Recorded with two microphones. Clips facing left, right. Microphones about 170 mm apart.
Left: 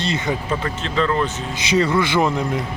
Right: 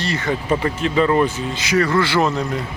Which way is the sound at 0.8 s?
10° right (ahead or behind).